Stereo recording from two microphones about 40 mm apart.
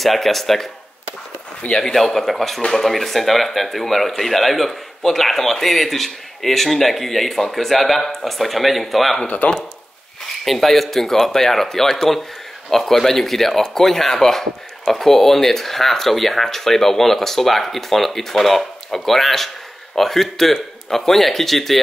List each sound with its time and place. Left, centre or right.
0.0 s speech: centre
1.6 s speech: left
2.0 s speech: centre
9.4 s speech: left
10.4 s speech: centre